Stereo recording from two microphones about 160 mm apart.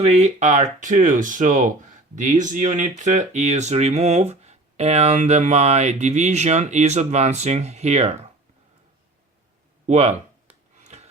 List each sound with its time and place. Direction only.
0.0 s speech: 45° right (ahead or behind)
9.8 s speech: 45° right (ahead or behind)
10.8 s a sound: 40° right (ahead or behind)